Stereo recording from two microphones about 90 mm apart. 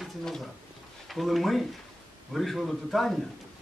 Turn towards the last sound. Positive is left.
turn(degrees=0)  # may be behind; listen again after turning